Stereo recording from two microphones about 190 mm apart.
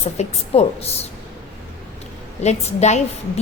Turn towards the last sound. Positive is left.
turn(degrees=35)  # may be behind; listen again after turning